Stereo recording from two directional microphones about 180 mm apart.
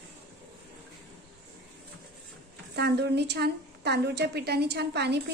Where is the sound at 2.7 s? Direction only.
65° right (ahead or behind).